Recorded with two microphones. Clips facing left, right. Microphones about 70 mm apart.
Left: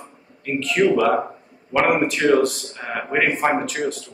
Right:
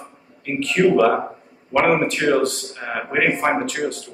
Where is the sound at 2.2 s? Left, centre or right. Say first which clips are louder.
Left 4 dB; centre.